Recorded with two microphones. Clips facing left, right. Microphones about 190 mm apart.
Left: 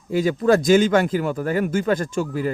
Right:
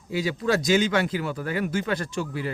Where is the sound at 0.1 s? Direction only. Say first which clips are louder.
Left 7 dB; 50° left (ahead or behind).